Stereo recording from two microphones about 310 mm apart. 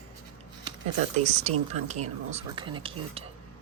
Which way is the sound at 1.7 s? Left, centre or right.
Right.